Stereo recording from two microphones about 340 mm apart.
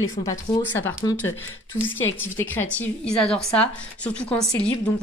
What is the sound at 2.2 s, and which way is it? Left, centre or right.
A woman's voice, centre.